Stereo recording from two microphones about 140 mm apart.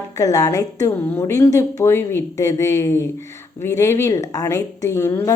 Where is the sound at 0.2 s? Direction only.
25° left (ahead or behind).